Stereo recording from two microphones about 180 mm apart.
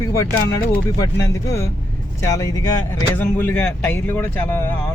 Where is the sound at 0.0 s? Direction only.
15° left (ahead or behind).